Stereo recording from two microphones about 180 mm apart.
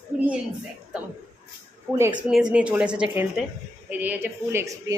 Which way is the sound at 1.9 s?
15° right (ahead or behind).